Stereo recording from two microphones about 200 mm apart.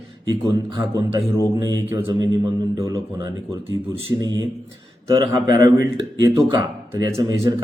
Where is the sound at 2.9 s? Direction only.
15° right (ahead or behind).